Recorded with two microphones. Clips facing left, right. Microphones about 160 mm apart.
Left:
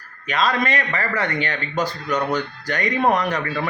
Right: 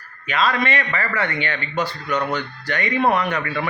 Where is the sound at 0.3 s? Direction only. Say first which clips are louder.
Even; 40° left (ahead or behind).